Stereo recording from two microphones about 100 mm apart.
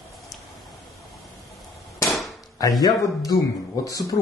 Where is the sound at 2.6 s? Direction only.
40° left (ahead or behind).